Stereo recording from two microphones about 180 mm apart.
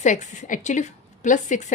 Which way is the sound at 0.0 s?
40° left (ahead or behind).